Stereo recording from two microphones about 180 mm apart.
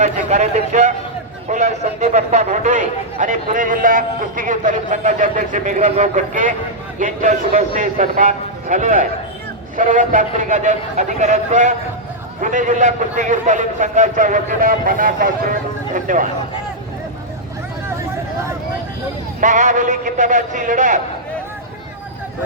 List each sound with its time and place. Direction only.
0.0 s a man's voice: 40° right (ahead or behind)
19.4 s speech: 45° right (ahead or behind)